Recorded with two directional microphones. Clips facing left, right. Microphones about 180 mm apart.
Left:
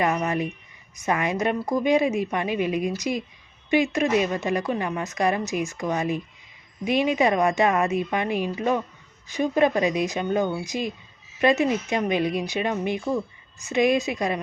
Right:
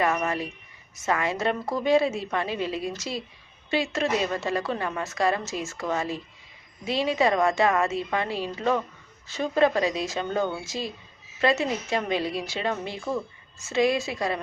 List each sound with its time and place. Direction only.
0.0 s a woman's voice: 20° left (ahead or behind)